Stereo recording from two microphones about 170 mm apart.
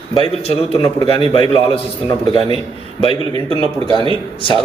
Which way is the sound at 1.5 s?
35° left (ahead or behind).